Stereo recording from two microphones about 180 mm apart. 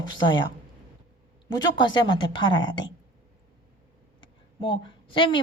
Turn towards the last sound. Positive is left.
turn(degrees=25)  # may be behind; listen again after turning